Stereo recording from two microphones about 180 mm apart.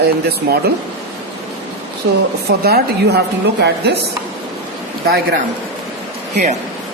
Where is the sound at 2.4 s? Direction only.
60° right (ahead or behind).